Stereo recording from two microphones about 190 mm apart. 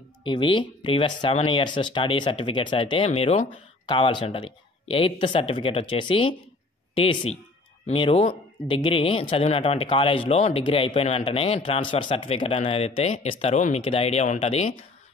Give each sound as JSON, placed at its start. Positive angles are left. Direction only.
{"t": 0.2, "sound": "speech", "side_deg": 25}